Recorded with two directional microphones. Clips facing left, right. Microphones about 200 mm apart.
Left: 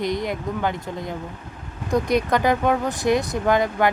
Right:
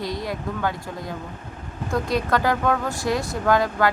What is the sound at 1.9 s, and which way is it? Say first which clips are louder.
Speech: left 3 dB; 20° left (ahead or behind).